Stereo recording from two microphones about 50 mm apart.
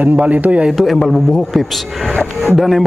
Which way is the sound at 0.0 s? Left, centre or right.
Right.